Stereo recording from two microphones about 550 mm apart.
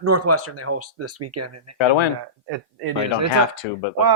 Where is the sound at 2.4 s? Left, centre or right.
Right.